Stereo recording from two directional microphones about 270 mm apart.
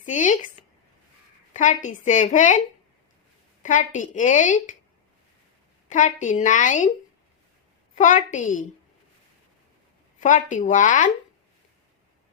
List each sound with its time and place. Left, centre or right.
0.0 s a woman's voice: left
1.5 s a woman's voice: left
3.6 s a woman's voice: left
5.9 s a woman's voice: left
7.9 s a woman's voice: left
10.2 s a woman's voice: left